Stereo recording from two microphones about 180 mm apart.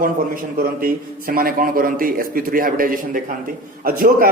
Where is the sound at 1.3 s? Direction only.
55° right (ahead or behind).